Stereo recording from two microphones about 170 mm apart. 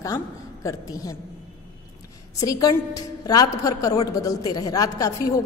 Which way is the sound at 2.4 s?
20° left (ahead or behind).